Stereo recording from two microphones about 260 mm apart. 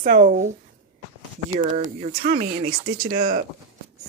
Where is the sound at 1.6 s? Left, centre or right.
Right.